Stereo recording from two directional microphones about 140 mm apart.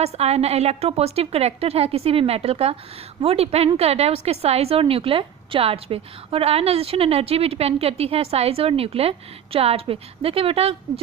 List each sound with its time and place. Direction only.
0.0 s a woman's voice: 50° right (ahead or behind)